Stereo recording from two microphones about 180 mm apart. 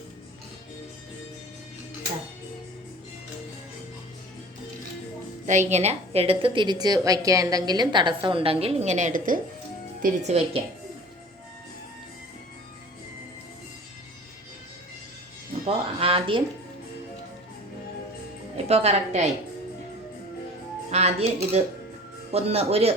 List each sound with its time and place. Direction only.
5.5 s a woman's voice: 40° right (ahead or behind)
10.0 s speech: 35° right (ahead or behind)
15.6 s a sound: 30° right (ahead or behind)
18.5 s a woman's voice: 35° right (ahead or behind)
20.9 s speech: 35° right (ahead or behind)